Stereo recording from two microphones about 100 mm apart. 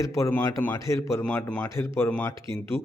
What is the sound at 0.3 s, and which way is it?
Speech, 20° left (ahead or behind).